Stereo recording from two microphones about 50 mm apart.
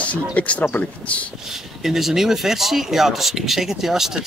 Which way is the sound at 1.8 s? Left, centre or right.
Centre.